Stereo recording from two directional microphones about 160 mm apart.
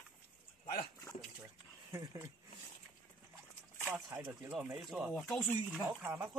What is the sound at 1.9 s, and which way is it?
Speech, 15° right (ahead or behind).